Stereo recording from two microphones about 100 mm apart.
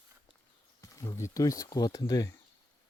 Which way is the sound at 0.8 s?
30° left (ahead or behind).